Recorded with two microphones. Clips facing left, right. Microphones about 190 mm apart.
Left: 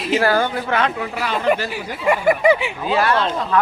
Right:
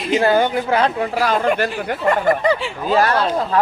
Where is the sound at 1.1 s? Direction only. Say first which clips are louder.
Even; 45° right (ahead or behind).